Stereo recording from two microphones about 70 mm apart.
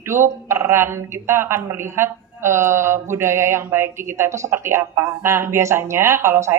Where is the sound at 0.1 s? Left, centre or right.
Right.